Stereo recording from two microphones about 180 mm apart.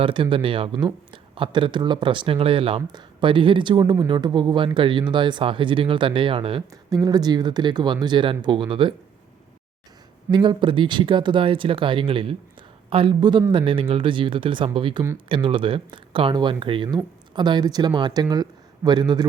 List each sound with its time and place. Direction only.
0.0 s speech: 30° right (ahead or behind)
10.3 s speech: 25° right (ahead or behind)